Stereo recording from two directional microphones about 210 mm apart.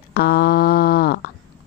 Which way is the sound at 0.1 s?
50° left (ahead or behind).